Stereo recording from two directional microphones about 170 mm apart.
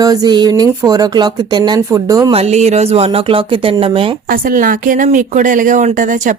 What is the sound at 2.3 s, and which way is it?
Speech, 40° right (ahead or behind).